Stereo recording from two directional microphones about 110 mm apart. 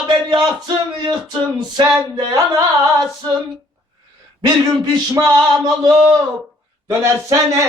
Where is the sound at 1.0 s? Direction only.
40° right (ahead or behind).